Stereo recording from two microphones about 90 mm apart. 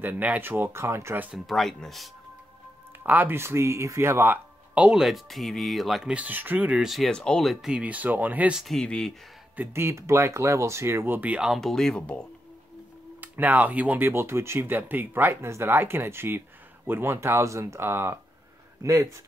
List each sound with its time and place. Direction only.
0.0 s speech: 20° right (ahead or behind)
1.3 s speech: centre (ahead or behind)
3.0 s speech: 20° right (ahead or behind); by 6.1 s 5° right (ahead or behind)
6.1 s speech: 20° right (ahead or behind)
6.8 s speech: centre (ahead or behind)
7.1 s speech: 10° left (ahead or behind)
7.6 s speech: 10° right (ahead or behind)
8.5 s speech: 5° left (ahead or behind)
9.6 s speech: 25° right (ahead or behind); by 11.6 s 10° right (ahead or behind)
11.6 s speech: 5° left (ahead or behind)
13.2 s speech: 20° right (ahead or behind); by 19.2 s 35° right (ahead or behind)